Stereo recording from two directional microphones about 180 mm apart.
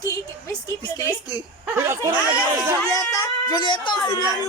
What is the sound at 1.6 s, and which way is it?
Speech, 15° right (ahead or behind).